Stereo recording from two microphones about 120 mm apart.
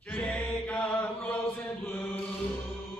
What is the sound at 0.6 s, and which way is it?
Chant, 15° left (ahead or behind).